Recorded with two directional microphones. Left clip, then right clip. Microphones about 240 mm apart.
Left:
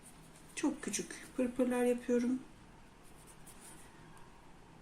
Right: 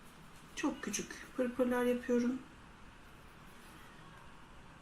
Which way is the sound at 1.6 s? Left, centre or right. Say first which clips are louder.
Left 1 dB; centre.